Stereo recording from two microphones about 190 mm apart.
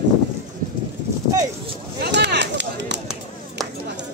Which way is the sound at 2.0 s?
65° right (ahead or behind).